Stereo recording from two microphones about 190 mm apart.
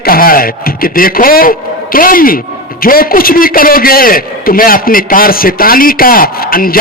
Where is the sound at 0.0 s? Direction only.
50° left (ahead or behind).